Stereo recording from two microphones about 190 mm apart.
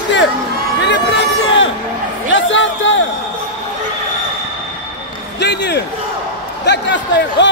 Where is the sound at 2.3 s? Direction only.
80° left.